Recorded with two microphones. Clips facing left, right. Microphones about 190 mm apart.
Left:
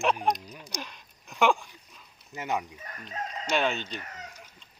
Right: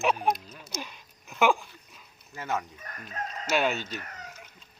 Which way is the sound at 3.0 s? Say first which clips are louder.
Even; 5° right (ahead or behind).